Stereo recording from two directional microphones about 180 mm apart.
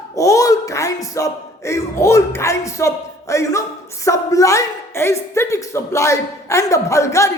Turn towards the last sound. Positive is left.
turn(degrees=15)  # may be behind; listen again after turning